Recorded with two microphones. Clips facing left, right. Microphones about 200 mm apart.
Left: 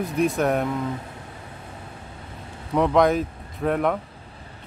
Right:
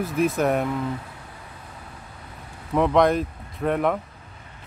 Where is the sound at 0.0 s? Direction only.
Centre (ahead or behind).